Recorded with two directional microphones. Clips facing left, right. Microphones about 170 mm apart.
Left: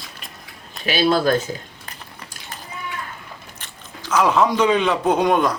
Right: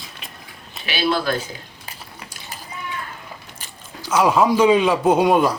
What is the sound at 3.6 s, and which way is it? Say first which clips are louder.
Speech: right 1 dB; 10° right (ahead or behind).